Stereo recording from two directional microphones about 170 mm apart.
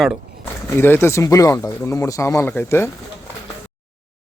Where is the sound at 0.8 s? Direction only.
10° left (ahead or behind).